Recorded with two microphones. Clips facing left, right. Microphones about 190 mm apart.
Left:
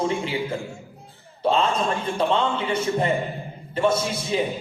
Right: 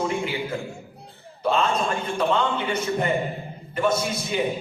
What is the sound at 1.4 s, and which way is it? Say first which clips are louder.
A man's voice: left 1 dB; 30° left (ahead or behind).